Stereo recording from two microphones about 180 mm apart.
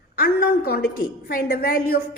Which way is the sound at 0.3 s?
60° left (ahead or behind).